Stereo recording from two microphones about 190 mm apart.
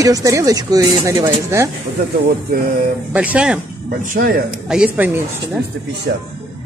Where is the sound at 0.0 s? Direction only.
15° right (ahead or behind).